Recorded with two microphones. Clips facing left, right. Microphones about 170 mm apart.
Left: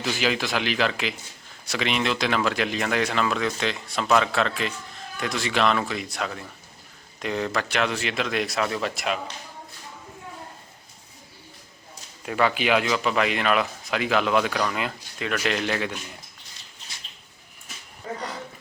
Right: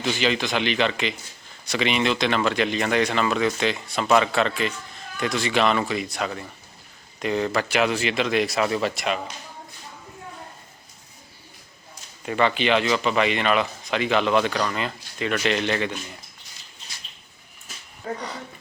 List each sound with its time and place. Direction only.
0.0 s speech: 5° left (ahead or behind)
12.2 s speech: centre (ahead or behind)